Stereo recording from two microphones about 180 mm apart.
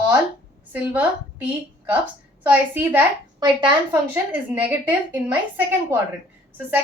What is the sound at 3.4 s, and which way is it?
Speech, 20° right (ahead or behind).